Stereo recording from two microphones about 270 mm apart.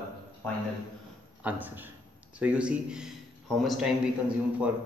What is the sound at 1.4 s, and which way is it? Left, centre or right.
A man's voice, centre.